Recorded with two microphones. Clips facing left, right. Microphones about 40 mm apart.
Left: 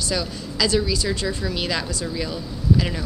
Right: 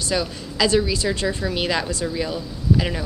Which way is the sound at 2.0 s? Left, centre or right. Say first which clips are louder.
Right 2 dB; centre.